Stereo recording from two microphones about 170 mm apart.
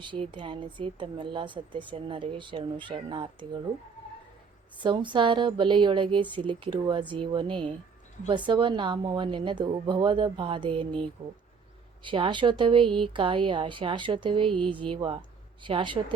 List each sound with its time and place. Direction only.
0.0 s speech: 30° right (ahead or behind)
4.8 s speech: 30° right (ahead or behind)